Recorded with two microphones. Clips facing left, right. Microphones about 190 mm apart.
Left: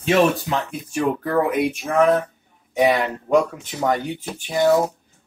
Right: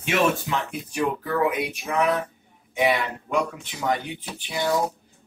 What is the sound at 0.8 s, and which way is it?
Speech, 50° left (ahead or behind).